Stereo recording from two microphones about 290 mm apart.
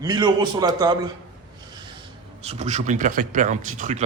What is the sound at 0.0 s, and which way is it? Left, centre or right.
A man's voice, centre.